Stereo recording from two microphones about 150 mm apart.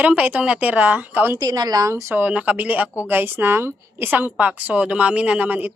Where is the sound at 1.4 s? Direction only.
25° right (ahead or behind).